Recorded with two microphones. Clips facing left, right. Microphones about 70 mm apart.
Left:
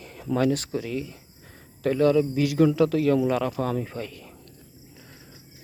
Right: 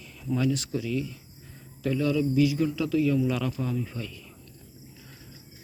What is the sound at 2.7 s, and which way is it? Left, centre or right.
Speech, left.